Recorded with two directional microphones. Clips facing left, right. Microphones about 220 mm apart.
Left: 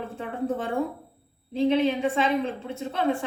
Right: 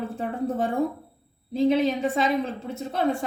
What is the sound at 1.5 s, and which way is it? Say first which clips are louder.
A woman's voice: right 1 dB; 40° right (ahead or behind).